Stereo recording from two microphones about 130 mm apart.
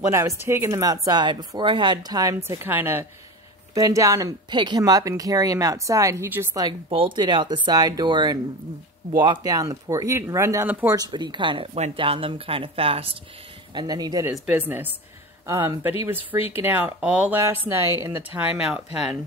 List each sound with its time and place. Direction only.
0.0 s speech: 20° right (ahead or behind)
6.9 s speech: 40° right (ahead or behind); by 11.0 s 15° right (ahead or behind)
11.0 s speech: 35° right (ahead or behind)
13.7 s speech: 30° right (ahead or behind)
15.4 s speech: 25° right (ahead or behind)
17.6 s speech: 20° right (ahead or behind)